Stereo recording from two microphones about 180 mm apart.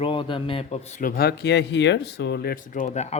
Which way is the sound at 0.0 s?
30° left (ahead or behind).